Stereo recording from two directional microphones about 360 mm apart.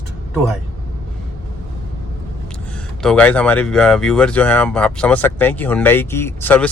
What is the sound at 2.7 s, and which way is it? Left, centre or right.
Speech, centre.